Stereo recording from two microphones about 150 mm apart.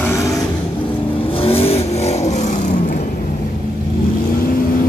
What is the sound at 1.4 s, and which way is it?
Vehicle, 40° left (ahead or behind).